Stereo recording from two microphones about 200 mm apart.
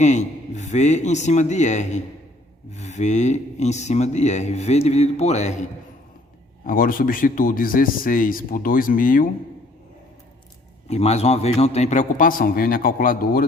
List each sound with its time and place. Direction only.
0.0 s speech: 35° left (ahead or behind)
6.7 s speech: 45° left (ahead or behind)
10.8 s speech: 30° left (ahead or behind)